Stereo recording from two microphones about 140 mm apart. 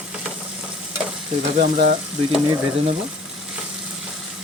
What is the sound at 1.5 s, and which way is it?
Speech, 65° right (ahead or behind).